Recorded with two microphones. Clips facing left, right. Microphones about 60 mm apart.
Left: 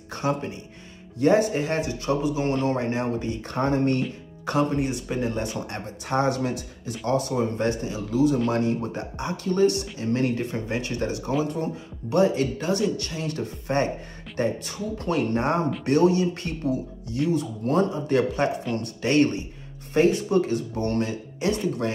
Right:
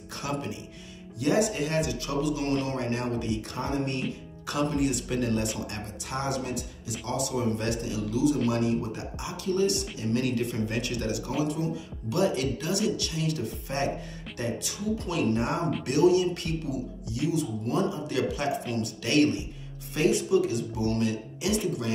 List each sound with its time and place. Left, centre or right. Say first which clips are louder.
0.1 s speech: left 6 dB; left
4.5 s speech: left 3 dB; left